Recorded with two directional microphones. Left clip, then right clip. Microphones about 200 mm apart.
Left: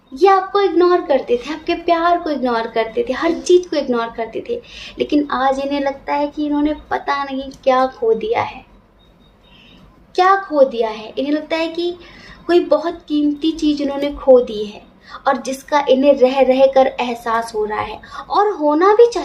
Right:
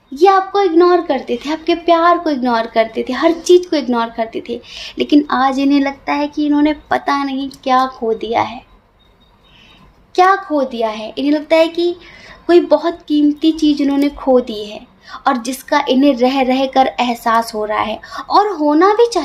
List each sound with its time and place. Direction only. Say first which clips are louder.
0.2 s speech: right 2 dB; 35° right (ahead or behind)
10.2 s speech: even; 35° right (ahead or behind)